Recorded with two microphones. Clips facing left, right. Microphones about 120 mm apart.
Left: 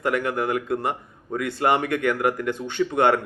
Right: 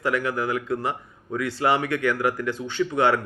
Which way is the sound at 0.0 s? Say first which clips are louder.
Left 1 dB; 50° left (ahead or behind).